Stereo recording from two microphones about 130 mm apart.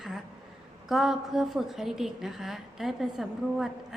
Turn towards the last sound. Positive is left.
turn(degrees=0)  # may be behind; listen again after turning